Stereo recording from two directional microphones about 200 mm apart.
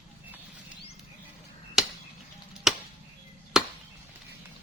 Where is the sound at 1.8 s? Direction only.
Centre (ahead or behind).